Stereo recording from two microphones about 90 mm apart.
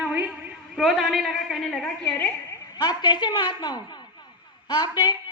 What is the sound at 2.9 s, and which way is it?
Speech, 55° left (ahead or behind).